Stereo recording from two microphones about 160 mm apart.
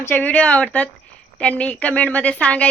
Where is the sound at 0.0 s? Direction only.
10° left (ahead or behind).